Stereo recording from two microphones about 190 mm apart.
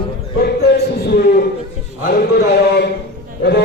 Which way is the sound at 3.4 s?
60° left (ahead or behind).